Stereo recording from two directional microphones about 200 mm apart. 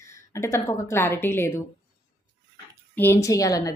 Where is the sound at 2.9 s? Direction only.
10° left (ahead or behind).